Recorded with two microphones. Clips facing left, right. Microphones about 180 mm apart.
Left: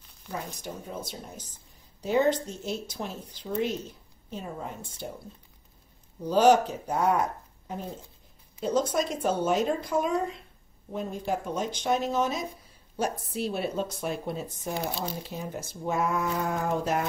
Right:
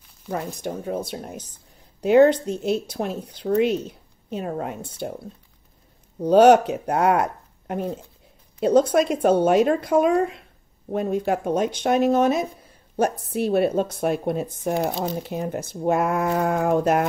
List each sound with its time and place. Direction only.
0.3 s a woman's voice: 60° right (ahead or behind)
6.2 s speech: 65° right (ahead or behind)